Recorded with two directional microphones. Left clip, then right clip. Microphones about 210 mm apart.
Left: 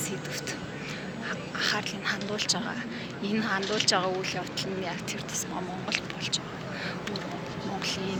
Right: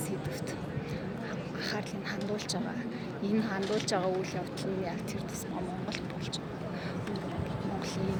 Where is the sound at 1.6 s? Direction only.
5° right (ahead or behind).